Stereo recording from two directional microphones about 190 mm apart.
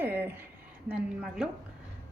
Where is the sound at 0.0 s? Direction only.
10° right (ahead or behind).